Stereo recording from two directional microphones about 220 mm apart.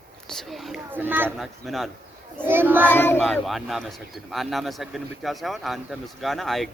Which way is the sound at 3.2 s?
Centre (ahead or behind).